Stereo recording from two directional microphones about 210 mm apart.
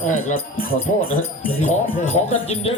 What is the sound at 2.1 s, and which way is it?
Speech, 30° left (ahead or behind).